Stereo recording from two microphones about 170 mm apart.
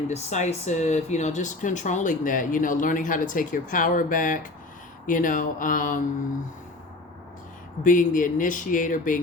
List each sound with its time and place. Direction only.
0.1 s speech: 45° left (ahead or behind)
7.9 s speech: 50° left (ahead or behind)